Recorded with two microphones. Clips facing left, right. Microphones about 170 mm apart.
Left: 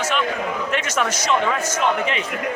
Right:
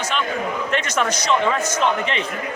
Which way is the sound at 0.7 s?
5° left (ahead or behind).